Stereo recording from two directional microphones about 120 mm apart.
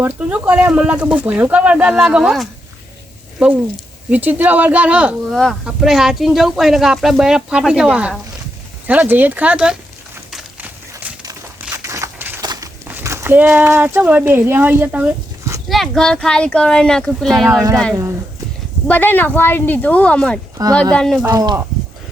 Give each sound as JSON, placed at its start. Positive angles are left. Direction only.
{"t": 0.0, "sound": "speech", "side_deg": -15}
{"t": 5.3, "sound": "speech", "side_deg": 0}
{"t": 11.7, "sound": "a sound", "side_deg": -25}
{"t": 12.4, "sound": "a sound", "side_deg": -35}
{"t": 12.9, "sound": "speech", "side_deg": -20}
{"t": 15.7, "sound": "speech", "side_deg": 5}
{"t": 18.9, "sound": "speech", "side_deg": 15}
{"t": 20.6, "sound": "speech", "side_deg": -30}
{"t": 20.9, "sound": "speech", "side_deg": 5}
{"t": 21.2, "sound": "speech", "side_deg": -35}